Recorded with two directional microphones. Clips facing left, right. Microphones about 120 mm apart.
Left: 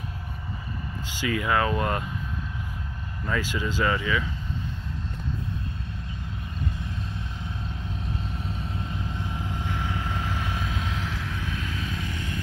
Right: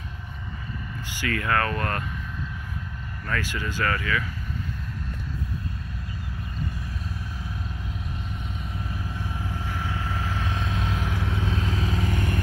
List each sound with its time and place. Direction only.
1.2 s speech: 15° left (ahead or behind)
3.3 s speech: 15° left (ahead or behind)
8.5 s vehicle: 30° left (ahead or behind); by 10.9 s 5° left (ahead or behind)
10.9 s vehicle: 10° right (ahead or behind)
11.5 s vehicle: 35° right (ahead or behind)